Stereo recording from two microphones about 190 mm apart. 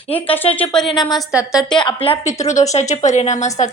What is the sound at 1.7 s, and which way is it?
Speech, 25° left (ahead or behind).